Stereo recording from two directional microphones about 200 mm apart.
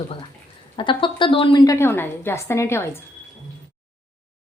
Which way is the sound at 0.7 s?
25° left (ahead or behind).